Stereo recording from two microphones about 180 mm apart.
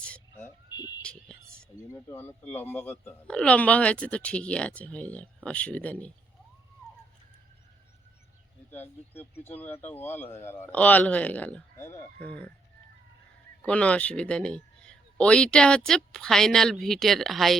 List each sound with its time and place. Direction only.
0.0 s vehicle: 10° left (ahead or behind)
1.0 s music: 5° left (ahead or behind)
1.9 s speech: 10° left (ahead or behind)
8.7 s speech: 10° left (ahead or behind)
13.6 s a man's voice: 5° left (ahead or behind)